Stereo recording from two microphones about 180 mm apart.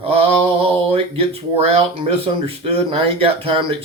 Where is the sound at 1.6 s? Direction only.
35° right (ahead or behind).